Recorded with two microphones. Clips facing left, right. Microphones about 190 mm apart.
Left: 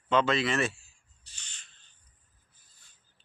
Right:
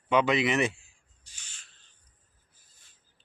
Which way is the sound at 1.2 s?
10° right (ahead or behind).